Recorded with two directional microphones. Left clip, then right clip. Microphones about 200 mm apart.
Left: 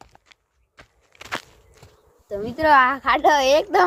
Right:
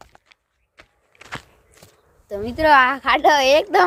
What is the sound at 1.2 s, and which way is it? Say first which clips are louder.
Biting: left 4 dB; 60° left (ahead or behind).